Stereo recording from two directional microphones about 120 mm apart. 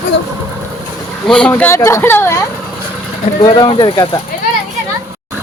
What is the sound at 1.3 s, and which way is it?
Speech, 10° left (ahead or behind).